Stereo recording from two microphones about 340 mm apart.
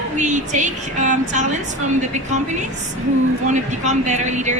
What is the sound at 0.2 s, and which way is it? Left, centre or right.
Speech, right.